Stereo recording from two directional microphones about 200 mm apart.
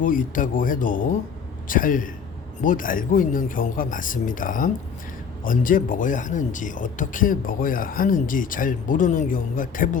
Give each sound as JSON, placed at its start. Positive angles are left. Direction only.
{"t": 0.0, "sound": "speech", "side_deg": 40}